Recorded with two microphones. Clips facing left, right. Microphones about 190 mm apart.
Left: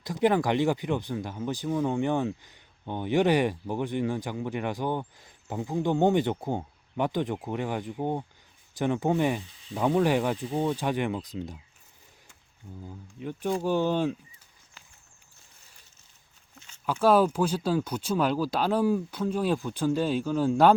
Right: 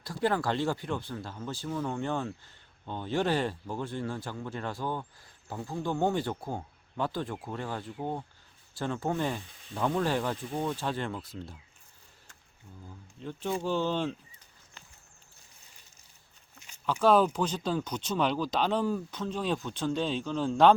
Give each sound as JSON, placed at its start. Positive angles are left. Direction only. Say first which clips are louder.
{"t": 0.0, "sound": "speech", "louder": "left 5 dB", "side_deg": 20}
{"t": 13.1, "sound": "speech", "louder": "left 4 dB", "side_deg": 10}
{"t": 16.8, "sound": "speech", "louder": "left 2 dB", "side_deg": 10}